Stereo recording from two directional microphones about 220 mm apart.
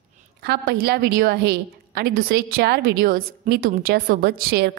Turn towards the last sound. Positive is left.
turn(degrees=-45)  # may be behind; listen again after turning